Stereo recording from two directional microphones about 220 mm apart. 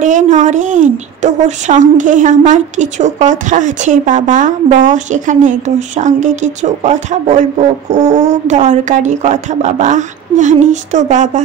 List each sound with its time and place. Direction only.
0.0 s a woman's voice: 35° right (ahead or behind)